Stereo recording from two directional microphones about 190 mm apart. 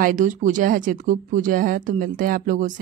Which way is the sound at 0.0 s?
45° right (ahead or behind).